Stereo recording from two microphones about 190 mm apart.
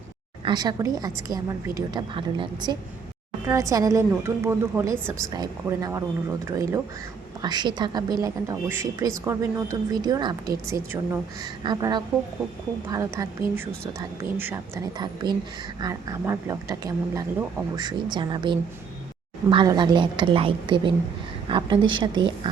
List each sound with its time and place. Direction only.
0.4 s a woman's voice: 20° right (ahead or behind)
14.3 s a woman's voice: 10° right (ahead or behind)